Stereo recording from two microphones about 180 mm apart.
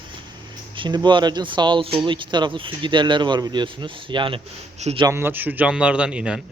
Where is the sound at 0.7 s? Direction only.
25° right (ahead or behind).